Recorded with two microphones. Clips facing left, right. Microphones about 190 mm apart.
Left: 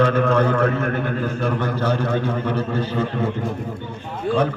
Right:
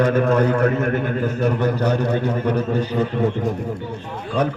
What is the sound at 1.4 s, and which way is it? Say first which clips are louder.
A man's voice: right 3 dB; 20° right (ahead or behind).